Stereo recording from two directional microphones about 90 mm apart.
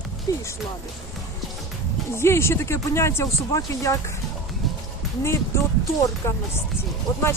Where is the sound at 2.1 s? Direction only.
30° left (ahead or behind).